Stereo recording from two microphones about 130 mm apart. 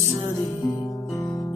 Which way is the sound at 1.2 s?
20° left (ahead or behind).